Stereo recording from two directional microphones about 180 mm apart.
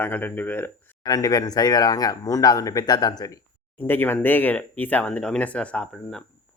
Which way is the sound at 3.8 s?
10° left (ahead or behind).